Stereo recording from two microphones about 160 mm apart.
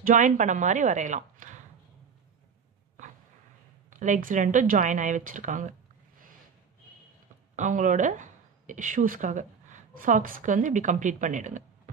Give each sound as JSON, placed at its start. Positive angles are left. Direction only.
{"t": 0.0, "sound": "a woman's voice", "side_deg": -55}
{"t": 3.9, "sound": "speech", "side_deg": -55}
{"t": 7.5, "sound": "speech", "side_deg": -55}